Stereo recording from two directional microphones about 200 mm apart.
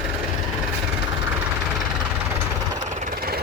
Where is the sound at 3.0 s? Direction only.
45° right (ahead or behind).